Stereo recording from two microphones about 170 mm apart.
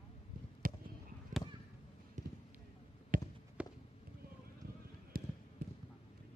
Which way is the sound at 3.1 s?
55° right (ahead or behind).